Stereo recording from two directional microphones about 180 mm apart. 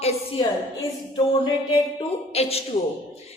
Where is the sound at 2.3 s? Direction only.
35° left (ahead or behind).